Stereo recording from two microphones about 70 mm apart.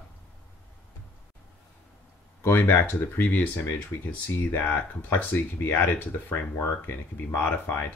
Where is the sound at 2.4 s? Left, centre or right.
Left.